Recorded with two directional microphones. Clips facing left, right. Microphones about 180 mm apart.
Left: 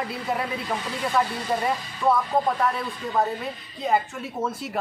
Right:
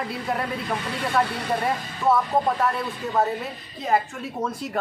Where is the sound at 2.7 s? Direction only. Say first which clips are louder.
Right 1 dB; centre (ahead or behind).